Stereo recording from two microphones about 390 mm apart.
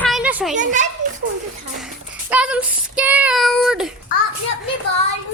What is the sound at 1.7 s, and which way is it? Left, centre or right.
Child singing, centre.